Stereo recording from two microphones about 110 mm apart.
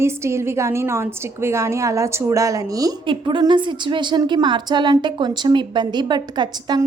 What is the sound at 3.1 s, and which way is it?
A woman's voice, 50° right (ahead or behind).